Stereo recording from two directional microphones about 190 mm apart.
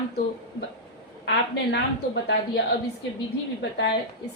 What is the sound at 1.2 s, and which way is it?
Speech, 65° left (ahead or behind).